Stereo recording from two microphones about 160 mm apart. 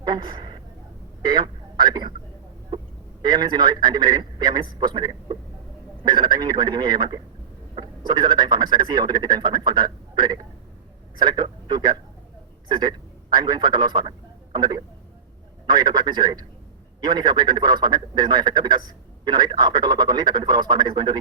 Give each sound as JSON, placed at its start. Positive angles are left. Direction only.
{"t": 0.0, "sound": "a woman's voice", "side_deg": -25}